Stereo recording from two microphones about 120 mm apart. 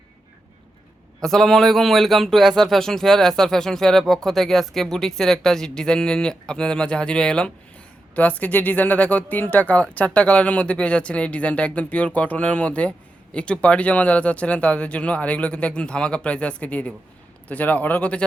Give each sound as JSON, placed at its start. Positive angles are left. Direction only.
{"t": 1.2, "sound": "speech", "side_deg": 5}